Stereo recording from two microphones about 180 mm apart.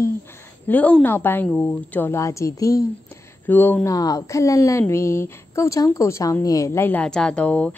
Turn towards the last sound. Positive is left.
turn(degrees=5)  # may be behind; listen again after turning